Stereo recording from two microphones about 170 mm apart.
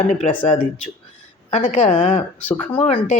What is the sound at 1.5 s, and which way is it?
Speech, 40° left (ahead or behind).